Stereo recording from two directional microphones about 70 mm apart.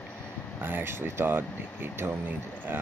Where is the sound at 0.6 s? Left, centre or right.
Right.